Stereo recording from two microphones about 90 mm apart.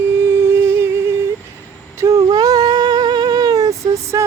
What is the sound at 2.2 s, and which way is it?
Humming, 45° right (ahead or behind).